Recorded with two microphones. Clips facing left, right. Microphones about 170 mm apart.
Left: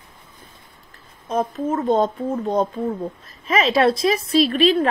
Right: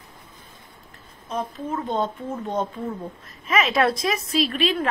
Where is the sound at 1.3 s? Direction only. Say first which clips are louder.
Left 6 dB; 45° left (ahead or behind).